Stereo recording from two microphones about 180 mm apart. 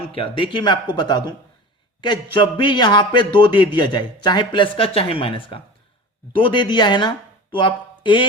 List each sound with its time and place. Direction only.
0.1 s a man's voice: 30° left (ahead or behind)